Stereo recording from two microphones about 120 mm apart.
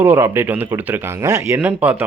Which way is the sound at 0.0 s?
20° right (ahead or behind).